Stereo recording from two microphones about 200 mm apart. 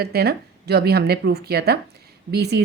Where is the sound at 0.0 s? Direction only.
50° right (ahead or behind).